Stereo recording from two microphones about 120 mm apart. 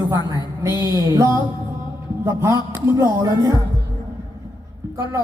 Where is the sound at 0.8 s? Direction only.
25° right (ahead or behind).